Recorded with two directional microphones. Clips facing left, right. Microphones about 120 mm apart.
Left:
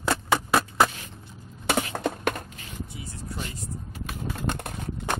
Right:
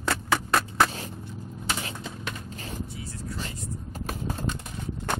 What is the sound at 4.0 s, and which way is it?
Typing, 40° right (ahead or behind).